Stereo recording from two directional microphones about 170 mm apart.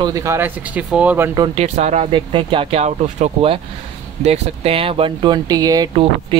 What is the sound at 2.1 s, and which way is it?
Speech, 30° right (ahead or behind).